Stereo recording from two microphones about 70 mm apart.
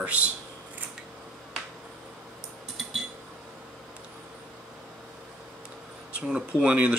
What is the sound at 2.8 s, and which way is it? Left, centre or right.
Cutlery, centre.